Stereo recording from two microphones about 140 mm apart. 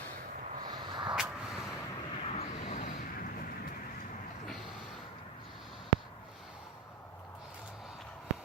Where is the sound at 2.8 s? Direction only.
90° left.